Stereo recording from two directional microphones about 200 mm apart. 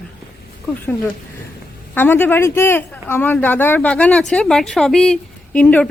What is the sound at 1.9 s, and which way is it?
Speech, 10° left (ahead or behind).